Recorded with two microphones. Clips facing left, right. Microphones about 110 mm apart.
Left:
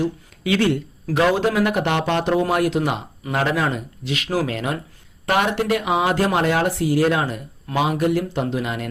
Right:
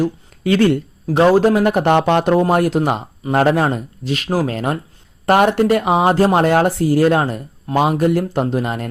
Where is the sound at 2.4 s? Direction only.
40° right (ahead or behind).